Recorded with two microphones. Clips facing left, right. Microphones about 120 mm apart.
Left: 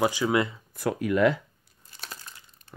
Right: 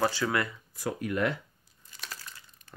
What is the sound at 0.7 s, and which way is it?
Speech, 80° left.